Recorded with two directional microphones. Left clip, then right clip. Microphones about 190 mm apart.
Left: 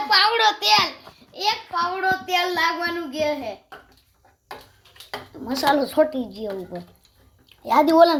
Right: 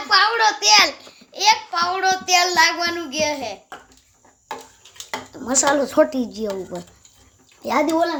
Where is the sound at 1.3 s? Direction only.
5° right (ahead or behind).